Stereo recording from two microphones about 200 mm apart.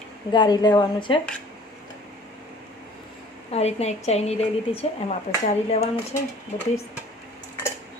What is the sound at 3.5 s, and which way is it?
Speech, 30° left (ahead or behind).